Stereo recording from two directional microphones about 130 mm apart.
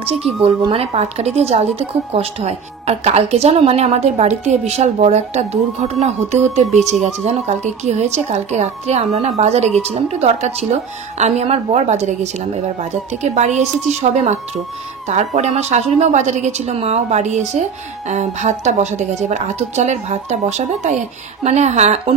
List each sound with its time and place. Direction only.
0.7 s a woman's voice: 50° right (ahead or behind)
15.0 s a woman's voice: 60° right (ahead or behind)